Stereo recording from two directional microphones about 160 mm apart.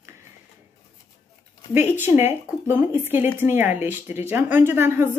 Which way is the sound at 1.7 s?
15° right (ahead or behind).